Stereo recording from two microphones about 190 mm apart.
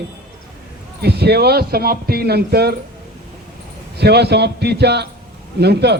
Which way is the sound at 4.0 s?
60° right (ahead or behind).